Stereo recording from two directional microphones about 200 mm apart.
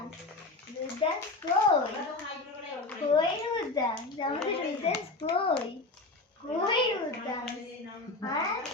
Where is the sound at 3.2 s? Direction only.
20° left (ahead or behind).